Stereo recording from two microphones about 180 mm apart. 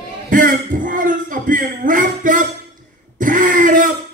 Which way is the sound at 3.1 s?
45° right (ahead or behind).